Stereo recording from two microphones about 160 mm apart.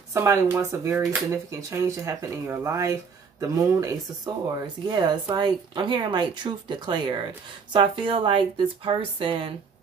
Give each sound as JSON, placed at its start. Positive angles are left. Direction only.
{"t": 0.1, "sound": "a woman's voice", "side_deg": -15}